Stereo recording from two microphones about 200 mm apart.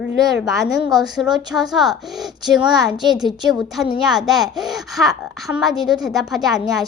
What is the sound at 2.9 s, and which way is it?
Speech, 20° right (ahead or behind).